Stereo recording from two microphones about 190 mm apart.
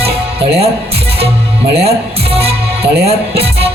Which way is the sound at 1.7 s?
30° right (ahead or behind).